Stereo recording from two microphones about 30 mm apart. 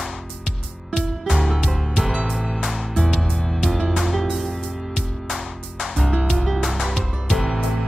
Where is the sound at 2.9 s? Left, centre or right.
Centre.